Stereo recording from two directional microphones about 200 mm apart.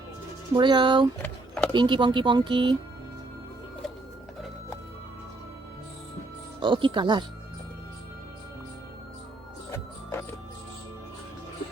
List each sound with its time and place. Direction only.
0.5 s speech: 25° right (ahead or behind)
1.2 s a sound: 5° left (ahead or behind)
1.7 s speech: 25° right (ahead or behind)
6.6 s speech: 25° right (ahead or behind)
9.7 s music: 10° left (ahead or behind)